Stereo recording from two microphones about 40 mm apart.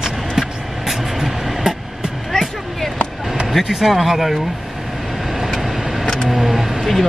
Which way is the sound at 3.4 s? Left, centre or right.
Centre.